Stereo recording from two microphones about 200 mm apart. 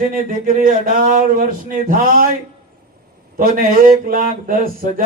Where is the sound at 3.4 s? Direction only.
45° right (ahead or behind).